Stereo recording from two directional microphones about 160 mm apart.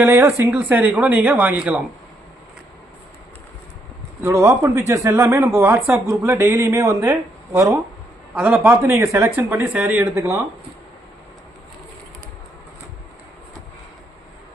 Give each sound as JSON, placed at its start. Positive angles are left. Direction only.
{"t": 0.0, "sound": "speech", "side_deg": -15}
{"t": 4.2, "sound": "speech", "side_deg": -20}